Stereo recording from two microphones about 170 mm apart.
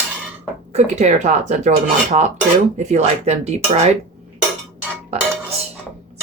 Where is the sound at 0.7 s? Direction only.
45° right (ahead or behind).